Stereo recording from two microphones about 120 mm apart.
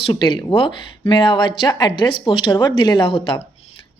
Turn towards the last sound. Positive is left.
turn(degrees=45)  # may be behind; listen again after turning